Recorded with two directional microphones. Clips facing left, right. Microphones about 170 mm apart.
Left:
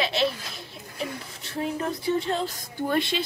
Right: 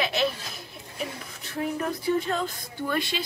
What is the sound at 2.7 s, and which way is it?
Speech, 45° left (ahead or behind).